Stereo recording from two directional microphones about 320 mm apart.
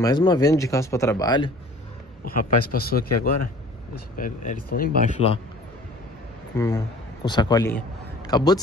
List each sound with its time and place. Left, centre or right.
0.0 s speech: centre
2.2 s speech: left
6.5 s speech: centre